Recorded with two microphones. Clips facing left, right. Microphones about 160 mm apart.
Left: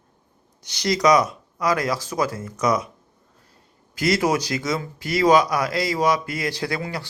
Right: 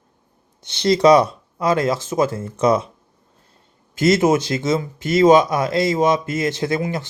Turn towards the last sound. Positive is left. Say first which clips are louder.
# right 6 dB
turn(degrees=-20)  # may be behind; listen again after turning